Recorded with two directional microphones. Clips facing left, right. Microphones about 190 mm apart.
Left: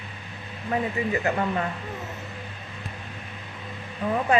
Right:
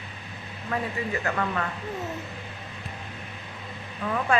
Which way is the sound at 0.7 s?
20° left (ahead or behind).